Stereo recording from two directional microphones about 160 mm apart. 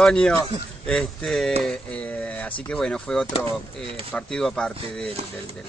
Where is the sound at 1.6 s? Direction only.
5° left (ahead or behind).